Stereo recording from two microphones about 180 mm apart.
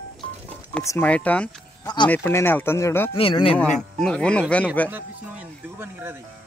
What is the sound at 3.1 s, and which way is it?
Speech, 30° left (ahead or behind).